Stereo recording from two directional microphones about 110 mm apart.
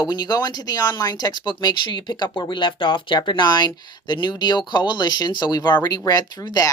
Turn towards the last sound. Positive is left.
turn(degrees=35)  # may be behind; listen again after turning